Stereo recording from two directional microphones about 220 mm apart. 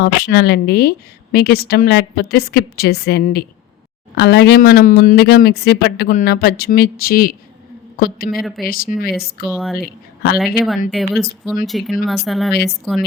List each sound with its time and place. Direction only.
0.0 s speech: 45° left (ahead or behind)
8.4 s speech: centre (ahead or behind)
8.6 s speech: 40° left (ahead or behind)
9.5 s speech: centre (ahead or behind)
10.9 s speech: centre (ahead or behind)